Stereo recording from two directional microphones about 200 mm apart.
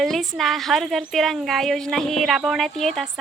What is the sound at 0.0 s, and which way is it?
A woman's voice, centre (ahead or behind).